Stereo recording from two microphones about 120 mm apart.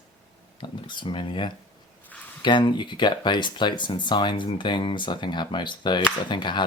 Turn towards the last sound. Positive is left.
turn(degrees=40)  # may be behind; listen again after turning